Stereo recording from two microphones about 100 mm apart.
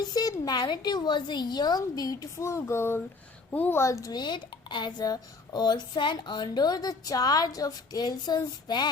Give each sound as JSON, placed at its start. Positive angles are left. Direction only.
{"t": 0.0, "sound": "speech", "side_deg": 40}
{"t": 4.2, "sound": "speech", "side_deg": 50}